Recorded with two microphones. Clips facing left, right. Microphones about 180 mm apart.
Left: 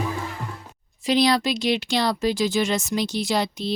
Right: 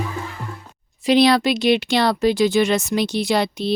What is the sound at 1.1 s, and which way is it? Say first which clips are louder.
Speech: right 5 dB; 65° right (ahead or behind).